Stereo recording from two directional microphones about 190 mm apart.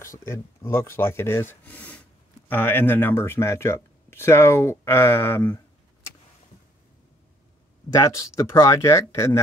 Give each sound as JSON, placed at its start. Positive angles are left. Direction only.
{"t": 0.0, "sound": "speech", "side_deg": 15}
{"t": 7.9, "sound": "speech", "side_deg": 15}